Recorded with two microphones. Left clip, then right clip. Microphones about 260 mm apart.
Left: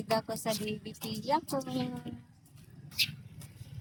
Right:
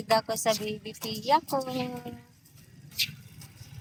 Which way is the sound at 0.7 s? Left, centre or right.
Centre.